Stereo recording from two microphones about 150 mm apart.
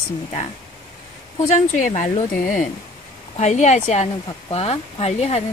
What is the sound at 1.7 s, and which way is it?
Speech, 55° left (ahead or behind).